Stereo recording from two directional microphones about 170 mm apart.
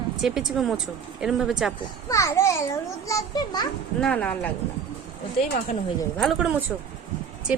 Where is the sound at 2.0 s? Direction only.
20° left (ahead or behind).